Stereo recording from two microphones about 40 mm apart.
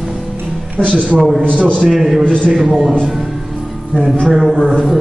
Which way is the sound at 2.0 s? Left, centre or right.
Centre.